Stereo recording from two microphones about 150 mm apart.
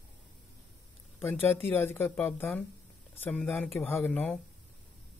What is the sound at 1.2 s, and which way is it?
Speech, 15° left (ahead or behind).